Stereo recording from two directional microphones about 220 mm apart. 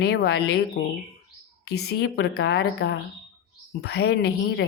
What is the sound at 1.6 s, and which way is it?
A woman's voice, 45° left (ahead or behind).